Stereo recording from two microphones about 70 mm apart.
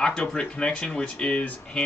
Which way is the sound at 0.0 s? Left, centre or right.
Centre.